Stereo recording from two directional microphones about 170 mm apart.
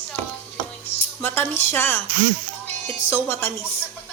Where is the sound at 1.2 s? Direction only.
10° left (ahead or behind).